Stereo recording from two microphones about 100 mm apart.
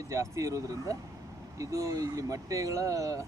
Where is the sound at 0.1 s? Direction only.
30° right (ahead or behind).